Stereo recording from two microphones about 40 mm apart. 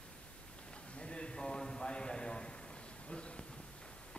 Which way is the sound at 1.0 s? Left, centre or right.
Left.